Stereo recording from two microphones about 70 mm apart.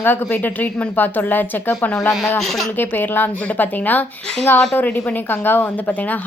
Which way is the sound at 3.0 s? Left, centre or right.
Left.